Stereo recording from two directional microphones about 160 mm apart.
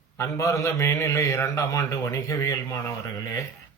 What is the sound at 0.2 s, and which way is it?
A man's voice, 20° left (ahead or behind).